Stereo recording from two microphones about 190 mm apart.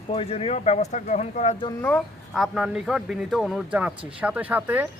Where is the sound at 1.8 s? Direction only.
Centre (ahead or behind).